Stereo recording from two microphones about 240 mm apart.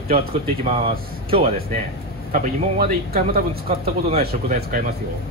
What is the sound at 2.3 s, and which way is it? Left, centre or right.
Speech, right.